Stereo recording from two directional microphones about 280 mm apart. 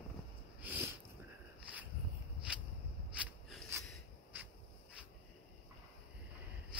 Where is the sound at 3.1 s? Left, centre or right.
Centre.